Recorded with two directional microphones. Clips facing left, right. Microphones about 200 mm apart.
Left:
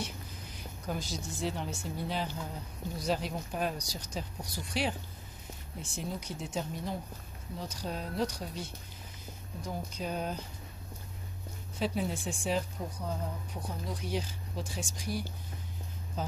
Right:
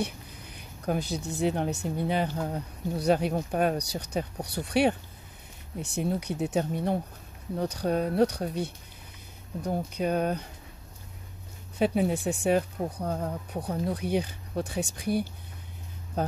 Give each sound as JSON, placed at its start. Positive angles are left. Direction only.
{"t": 0.0, "sound": "speech", "side_deg": -60}
{"t": 11.8, "sound": "speech", "side_deg": -60}